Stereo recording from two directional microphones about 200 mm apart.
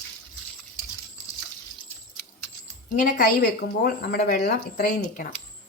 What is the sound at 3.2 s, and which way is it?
Speech, 50° left (ahead or behind).